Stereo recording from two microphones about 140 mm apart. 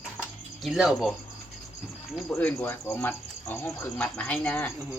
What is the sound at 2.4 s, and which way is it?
Speech, 15° left (ahead or behind).